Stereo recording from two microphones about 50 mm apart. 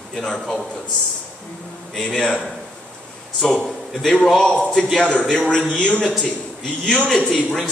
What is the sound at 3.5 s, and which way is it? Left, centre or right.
A man's voice, centre.